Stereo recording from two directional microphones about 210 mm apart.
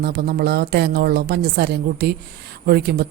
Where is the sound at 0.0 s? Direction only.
50° right (ahead or behind).